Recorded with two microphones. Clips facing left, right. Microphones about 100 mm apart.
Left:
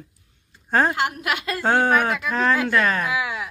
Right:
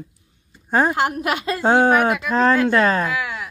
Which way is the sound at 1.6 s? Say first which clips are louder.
Right 4 dB; 20° right (ahead or behind).